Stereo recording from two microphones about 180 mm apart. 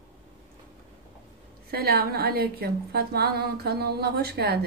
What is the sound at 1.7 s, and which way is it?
Speech, 60° right (ahead or behind).